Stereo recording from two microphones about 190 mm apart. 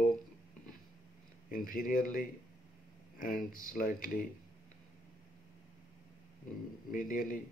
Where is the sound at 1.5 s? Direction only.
45° left (ahead or behind).